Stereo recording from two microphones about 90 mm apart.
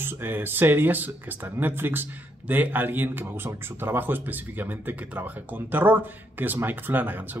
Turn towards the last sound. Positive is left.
turn(degrees=-20)  # may be behind; listen again after turning